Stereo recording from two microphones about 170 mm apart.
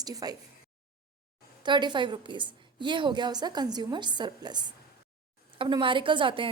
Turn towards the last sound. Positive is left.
turn(degrees=-30)  # may be behind; listen again after turning